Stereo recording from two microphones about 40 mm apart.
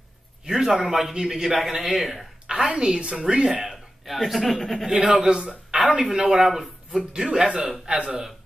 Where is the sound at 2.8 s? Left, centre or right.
Right.